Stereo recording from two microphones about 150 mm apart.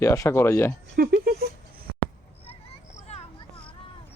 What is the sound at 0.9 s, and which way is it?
Speech, 90° right.